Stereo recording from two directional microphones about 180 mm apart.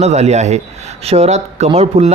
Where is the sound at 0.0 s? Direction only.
40° right (ahead or behind).